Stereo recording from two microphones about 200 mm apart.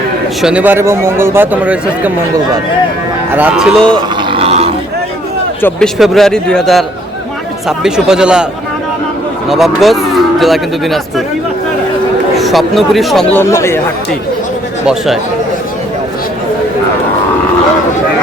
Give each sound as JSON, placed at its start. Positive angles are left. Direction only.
{"t": 0.4, "sound": "a man's voice", "side_deg": -5}
{"t": 3.3, "sound": "a man's voice", "side_deg": -5}
{"t": 4.2, "sound": "a sound", "side_deg": -25}
{"t": 5.6, "sound": "a man's voice", "side_deg": 0}
{"t": 9.5, "sound": "a man's voice", "side_deg": 0}
{"t": 12.4, "sound": "a man's voice", "side_deg": 0}
{"t": 14.8, "sound": "a man's voice", "side_deg": 0}